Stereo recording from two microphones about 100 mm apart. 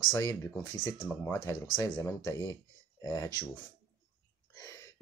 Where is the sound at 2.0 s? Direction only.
35° left (ahead or behind).